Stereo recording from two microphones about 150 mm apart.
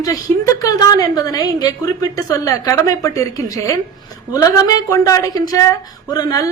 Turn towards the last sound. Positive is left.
turn(degrees=25)  # may be behind; listen again after turning